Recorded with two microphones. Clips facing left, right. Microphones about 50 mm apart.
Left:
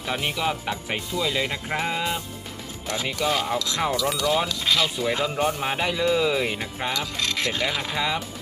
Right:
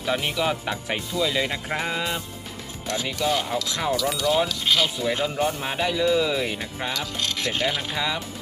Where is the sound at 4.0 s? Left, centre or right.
Centre.